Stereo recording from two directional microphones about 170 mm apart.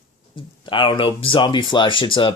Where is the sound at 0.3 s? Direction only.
30° left (ahead or behind).